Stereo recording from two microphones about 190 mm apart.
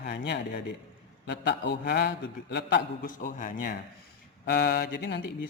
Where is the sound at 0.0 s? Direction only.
60° left (ahead or behind).